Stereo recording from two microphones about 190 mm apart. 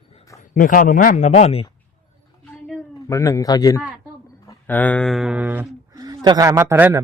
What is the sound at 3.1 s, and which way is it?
Speech, 15° left (ahead or behind).